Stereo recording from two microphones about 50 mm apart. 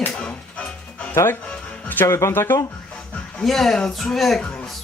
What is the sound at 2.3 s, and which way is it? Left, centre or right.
Speech, left.